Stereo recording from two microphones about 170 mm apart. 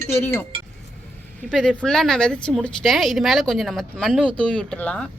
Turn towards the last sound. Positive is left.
turn(degrees=5)  # may be behind; listen again after turning